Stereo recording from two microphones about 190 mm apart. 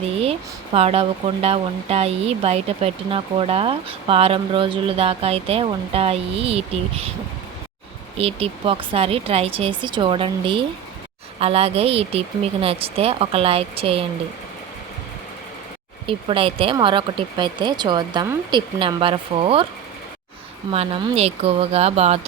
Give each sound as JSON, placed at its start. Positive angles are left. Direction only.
{"t": 0.0, "sound": "speech", "side_deg": -30}
{"t": 8.2, "sound": "speech", "side_deg": -30}
{"t": 16.0, "sound": "speech", "side_deg": -30}
{"t": 20.7, "sound": "speech", "side_deg": -30}